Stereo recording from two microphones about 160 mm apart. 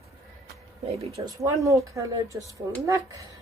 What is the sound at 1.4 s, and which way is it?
Speech, 20° right (ahead or behind).